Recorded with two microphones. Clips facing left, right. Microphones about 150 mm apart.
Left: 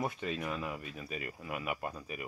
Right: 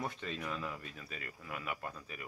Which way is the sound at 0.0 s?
10° left (ahead or behind).